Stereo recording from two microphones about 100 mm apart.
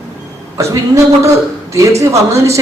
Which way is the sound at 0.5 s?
30° right (ahead or behind).